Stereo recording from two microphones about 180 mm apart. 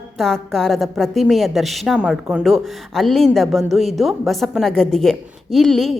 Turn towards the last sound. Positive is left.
turn(degrees=0)  # may be behind; listen again after turning